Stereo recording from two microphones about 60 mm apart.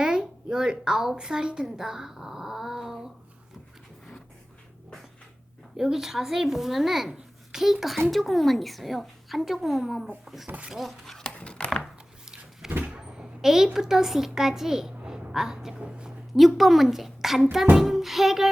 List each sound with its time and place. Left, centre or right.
0.0 s a woman's voice: centre
5.7 s a child's voice: centre
11.2 s dog: centre
11.8 s a sound: centre
12.7 s cupboard open or close: right
13.4 s a woman's voice: centre
15.8 s a sound: centre
16.3 s a child's voice: centre